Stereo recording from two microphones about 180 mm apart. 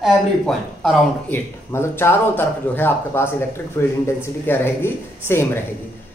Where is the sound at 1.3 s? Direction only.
15° left (ahead or behind).